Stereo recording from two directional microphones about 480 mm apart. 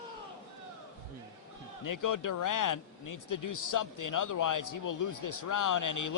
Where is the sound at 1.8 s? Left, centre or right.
Left.